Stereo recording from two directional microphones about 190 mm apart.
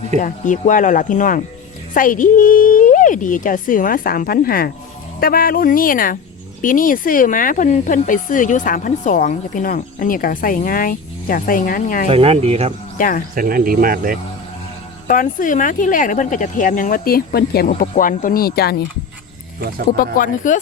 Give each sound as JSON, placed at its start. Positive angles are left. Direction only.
{"t": 0.2, "sound": "speech", "side_deg": 40}
{"t": 12.0, "sound": "speech", "side_deg": -30}
{"t": 13.0, "sound": "speech", "side_deg": 45}
{"t": 13.3, "sound": "speech", "side_deg": -50}
{"t": 15.0, "sound": "speech", "side_deg": 45}
{"t": 17.7, "sound": "speech", "side_deg": 45}
{"t": 20.0, "sound": "speech", "side_deg": 45}